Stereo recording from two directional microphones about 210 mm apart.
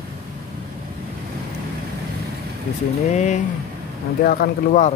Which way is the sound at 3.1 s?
35° left (ahead or behind).